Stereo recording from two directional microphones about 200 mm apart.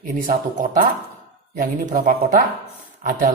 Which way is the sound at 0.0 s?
45° right (ahead or behind).